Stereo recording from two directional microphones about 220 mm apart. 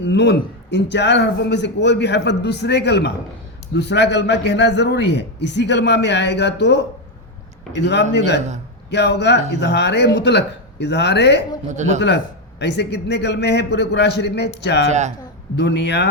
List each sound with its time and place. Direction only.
0.0 s a man's voice: 50° left (ahead or behind)
11.7 s speech: 35° right (ahead or behind)
11.9 s a man's voice: 50° left (ahead or behind)
14.8 s speech: 30° right (ahead or behind)
15.5 s a man's voice: 50° left (ahead or behind)